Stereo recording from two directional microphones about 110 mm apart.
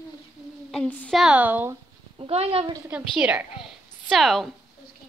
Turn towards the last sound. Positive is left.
turn(degrees=0)  # may be behind; listen again after turning